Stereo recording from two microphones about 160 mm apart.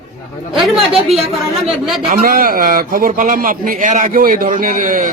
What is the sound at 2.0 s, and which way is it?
A man's voice, 60° right (ahead or behind).